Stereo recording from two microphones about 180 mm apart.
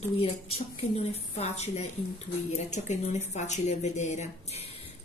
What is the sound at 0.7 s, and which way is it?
A woman's voice, 35° left (ahead or behind).